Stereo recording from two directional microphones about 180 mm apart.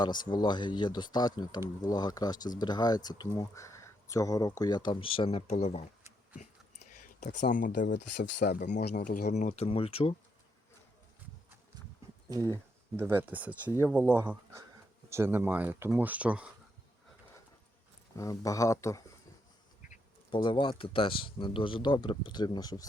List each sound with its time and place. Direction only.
0.0 s speech: 25° left (ahead or behind)
6.0 s a sound: 15° right (ahead or behind)
7.5 s speech: 50° left (ahead or behind)
8.4 s speech: 65° left (ahead or behind)
9.0 s speech: 45° left (ahead or behind); by 10.2 s 30° left (ahead or behind)
13.0 s speech: 10° right (ahead or behind)
18.2 s speech: 20° left (ahead or behind)
20.3 s speech: 25° left (ahead or behind)